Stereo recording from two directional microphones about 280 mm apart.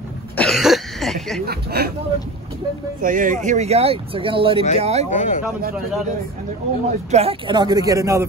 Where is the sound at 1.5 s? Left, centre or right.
Right.